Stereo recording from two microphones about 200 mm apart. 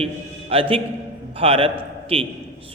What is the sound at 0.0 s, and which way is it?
A man's voice, 30° right (ahead or behind).